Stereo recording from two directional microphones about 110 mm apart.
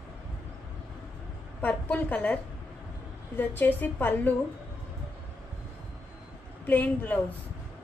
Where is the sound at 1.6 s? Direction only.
15° left (ahead or behind).